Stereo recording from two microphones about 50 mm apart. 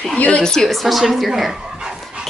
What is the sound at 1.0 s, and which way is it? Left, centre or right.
Dog, centre.